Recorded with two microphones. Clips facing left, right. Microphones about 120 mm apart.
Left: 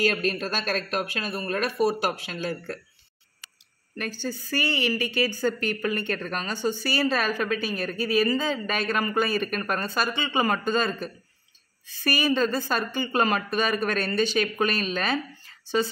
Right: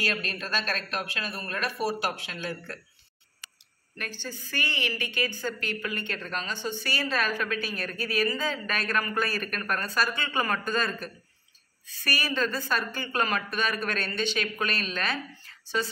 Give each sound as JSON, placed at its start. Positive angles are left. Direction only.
{"t": 0.1, "sound": "speech", "side_deg": 45}
{"t": 4.0, "sound": "a woman's voice", "side_deg": 35}